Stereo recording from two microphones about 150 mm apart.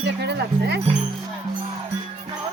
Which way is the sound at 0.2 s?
90° right.